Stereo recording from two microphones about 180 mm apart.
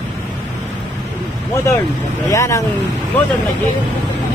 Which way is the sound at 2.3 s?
15° left (ahead or behind).